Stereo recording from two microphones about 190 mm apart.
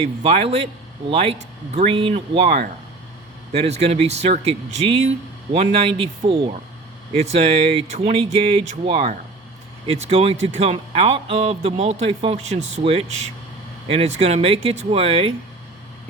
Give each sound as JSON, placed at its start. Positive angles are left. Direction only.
{"t": 0.2, "sound": "speech", "side_deg": -30}